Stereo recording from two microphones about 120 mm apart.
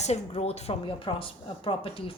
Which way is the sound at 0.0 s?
60° left (ahead or behind).